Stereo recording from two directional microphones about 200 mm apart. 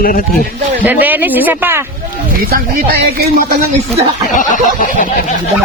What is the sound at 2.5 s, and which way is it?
Speech, 50° right (ahead or behind).